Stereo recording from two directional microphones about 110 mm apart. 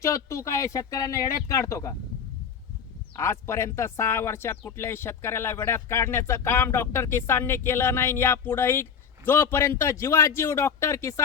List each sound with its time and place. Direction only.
0.0 s speech: 30° left (ahead or behind)
3.2 s speech: 25° left (ahead or behind)